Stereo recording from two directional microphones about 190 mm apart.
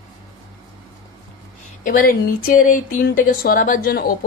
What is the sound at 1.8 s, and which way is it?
Speech, 45° left (ahead or behind).